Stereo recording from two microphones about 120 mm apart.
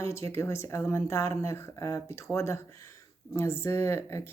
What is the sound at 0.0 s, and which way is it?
Speech, 25° left (ahead or behind).